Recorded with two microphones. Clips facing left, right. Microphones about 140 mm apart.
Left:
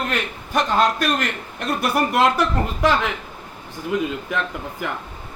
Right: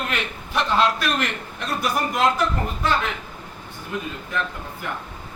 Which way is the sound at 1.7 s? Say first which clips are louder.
Left 3 dB; 60° left (ahead or behind).